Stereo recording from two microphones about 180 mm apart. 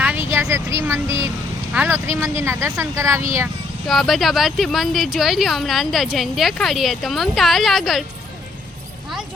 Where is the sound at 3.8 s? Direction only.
Centre (ahead or behind).